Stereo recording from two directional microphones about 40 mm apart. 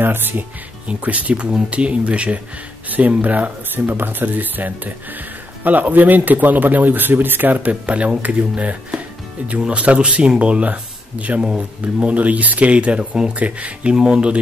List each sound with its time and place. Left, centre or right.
0.0 s speech: right
0.8 s speech: right
2.9 s speech: right
3.7 s speech: right
9.8 s speech: right